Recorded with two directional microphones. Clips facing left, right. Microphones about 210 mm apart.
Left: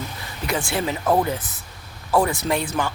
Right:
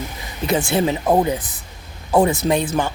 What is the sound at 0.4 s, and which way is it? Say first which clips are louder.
Speech: right 6 dB; 20° right (ahead or behind).